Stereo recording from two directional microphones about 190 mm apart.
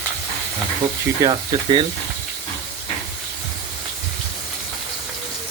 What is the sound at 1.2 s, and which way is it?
Speech, 25° right (ahead or behind).